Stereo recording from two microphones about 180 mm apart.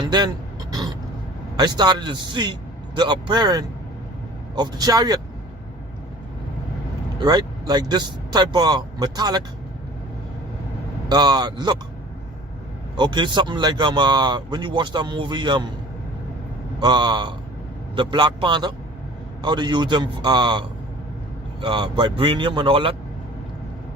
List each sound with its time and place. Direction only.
0.0 s speech: 25° right (ahead or behind)
1.5 s speech: 25° right (ahead or behind)
7.2 s speech: 20° right (ahead or behind)
11.1 s speech: 25° right (ahead or behind)
13.0 s speech: 25° right (ahead or behind)
16.8 s speech: 25° right (ahead or behind)